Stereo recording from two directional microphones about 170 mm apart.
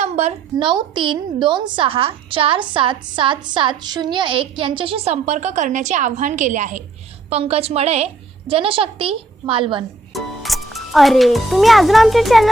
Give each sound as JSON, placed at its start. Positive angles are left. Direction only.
{"t": 0.0, "sound": "a woman's voice", "side_deg": -40}
{"t": 10.1, "sound": "a child's voice", "side_deg": 0}